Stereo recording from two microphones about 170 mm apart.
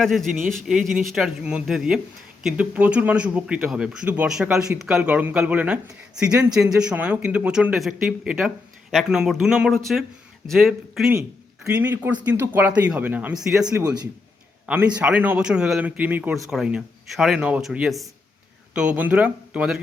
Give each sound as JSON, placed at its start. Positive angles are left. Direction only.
{"t": 0.0, "sound": "speech", "side_deg": 0}
{"t": 11.1, "sound": "speech", "side_deg": -15}
{"t": 13.7, "sound": "a man's voice", "side_deg": -20}
{"t": 14.7, "sound": "speech", "side_deg": -10}